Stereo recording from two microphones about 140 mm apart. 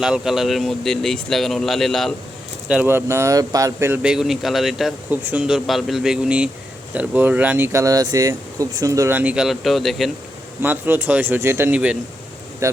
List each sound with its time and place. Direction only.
0.0 s speech: 5° right (ahead or behind)
2.6 s speech: 10° right (ahead or behind)
4.0 s speech: 5° right (ahead or behind)
5.1 s speech: 10° right (ahead or behind)
10.6 s speech: 15° right (ahead or behind)
12.6 s speech: 20° right (ahead or behind)